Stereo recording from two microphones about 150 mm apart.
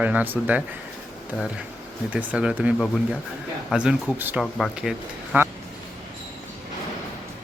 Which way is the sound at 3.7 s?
5° right (ahead or behind).